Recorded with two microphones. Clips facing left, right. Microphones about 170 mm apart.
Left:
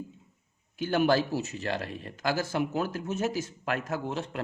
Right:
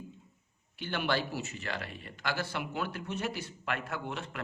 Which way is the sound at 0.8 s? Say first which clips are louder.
Left 8 dB; 40° left (ahead or behind).